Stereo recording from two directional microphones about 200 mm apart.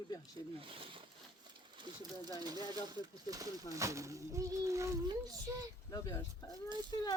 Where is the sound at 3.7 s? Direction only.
15° right (ahead or behind).